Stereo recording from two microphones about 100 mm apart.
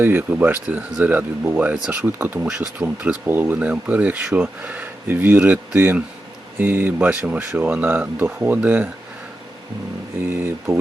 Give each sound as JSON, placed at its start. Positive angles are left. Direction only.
{"t": 0.0, "sound": "speech", "side_deg": -20}
{"t": 10.2, "sound": "speech", "side_deg": -25}